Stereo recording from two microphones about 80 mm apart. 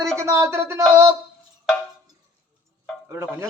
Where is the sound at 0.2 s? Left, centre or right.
Right.